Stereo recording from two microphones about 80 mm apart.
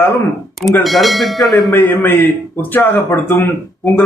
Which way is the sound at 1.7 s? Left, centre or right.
Left.